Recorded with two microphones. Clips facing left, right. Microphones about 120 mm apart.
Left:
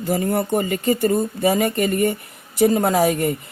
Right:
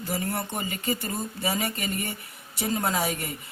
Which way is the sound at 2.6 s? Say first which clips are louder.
Left 11 dB; 50° left (ahead or behind).